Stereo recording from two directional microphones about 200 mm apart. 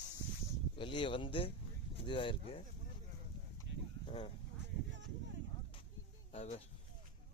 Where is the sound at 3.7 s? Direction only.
65° right (ahead or behind).